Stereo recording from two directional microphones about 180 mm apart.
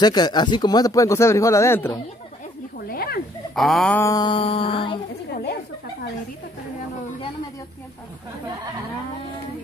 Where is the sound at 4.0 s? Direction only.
20° left (ahead or behind).